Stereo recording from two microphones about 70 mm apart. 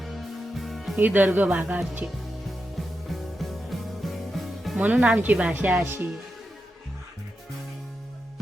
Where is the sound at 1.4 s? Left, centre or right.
Centre.